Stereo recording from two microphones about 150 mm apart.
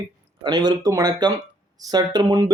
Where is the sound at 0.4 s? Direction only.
25° right (ahead or behind).